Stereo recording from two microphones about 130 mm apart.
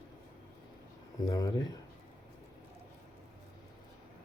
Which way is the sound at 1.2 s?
30° left (ahead or behind).